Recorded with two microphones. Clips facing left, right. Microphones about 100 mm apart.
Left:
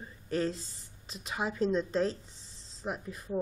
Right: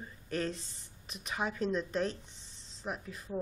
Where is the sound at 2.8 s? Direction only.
20° left (ahead or behind).